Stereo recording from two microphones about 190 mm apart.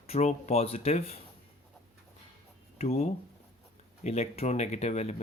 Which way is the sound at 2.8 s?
35° left (ahead or behind).